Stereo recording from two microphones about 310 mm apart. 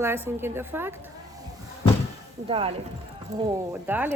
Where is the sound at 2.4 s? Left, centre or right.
Centre.